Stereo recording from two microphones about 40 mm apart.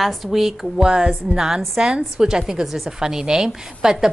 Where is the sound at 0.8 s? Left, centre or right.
Right.